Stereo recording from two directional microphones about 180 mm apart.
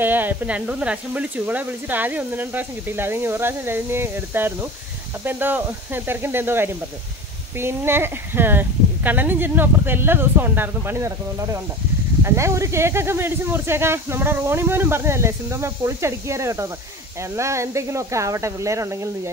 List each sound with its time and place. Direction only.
0.0 s speech: 10° right (ahead or behind)